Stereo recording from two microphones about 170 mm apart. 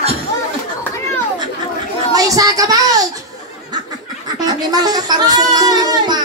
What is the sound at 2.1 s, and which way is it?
Child singing, 20° right (ahead or behind).